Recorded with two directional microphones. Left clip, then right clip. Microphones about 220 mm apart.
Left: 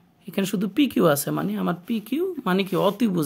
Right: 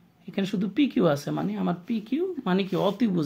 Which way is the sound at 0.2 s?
30° left (ahead or behind).